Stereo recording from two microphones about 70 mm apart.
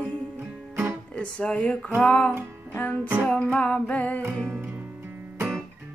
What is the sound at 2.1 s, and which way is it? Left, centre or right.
Music, centre.